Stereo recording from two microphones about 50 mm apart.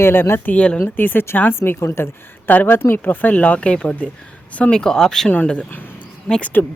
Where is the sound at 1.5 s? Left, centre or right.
Left.